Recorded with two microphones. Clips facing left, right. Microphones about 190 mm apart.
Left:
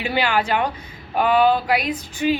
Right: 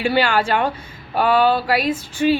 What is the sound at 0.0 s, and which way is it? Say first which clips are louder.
Speech: right 3 dB; 15° left (ahead or behind).